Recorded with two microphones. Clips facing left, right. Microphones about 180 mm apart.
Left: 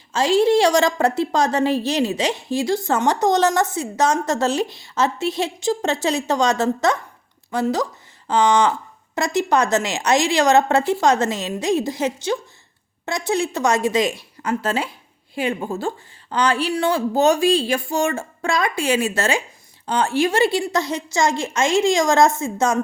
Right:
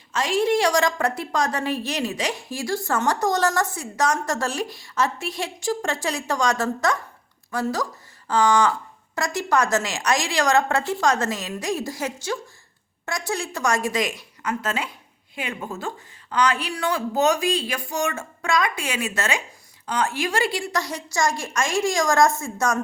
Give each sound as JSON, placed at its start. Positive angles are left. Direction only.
{"t": 0.1, "sound": "a woman's voice", "side_deg": 30}